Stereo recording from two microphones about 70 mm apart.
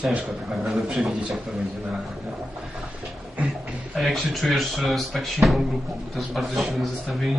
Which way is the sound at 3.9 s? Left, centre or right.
Centre.